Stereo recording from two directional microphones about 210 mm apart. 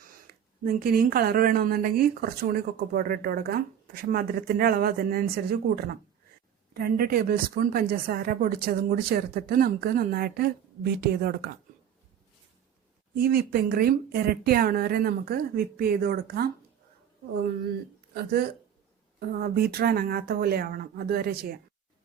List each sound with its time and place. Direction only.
0.6 s speech: 45° right (ahead or behind)
13.1 s speech: 45° right (ahead or behind)
18.1 s speech: 50° right (ahead or behind)